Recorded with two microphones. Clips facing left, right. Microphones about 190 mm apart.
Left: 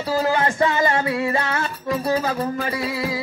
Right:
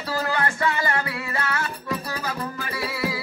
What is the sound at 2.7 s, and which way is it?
Music, 20° left (ahead or behind).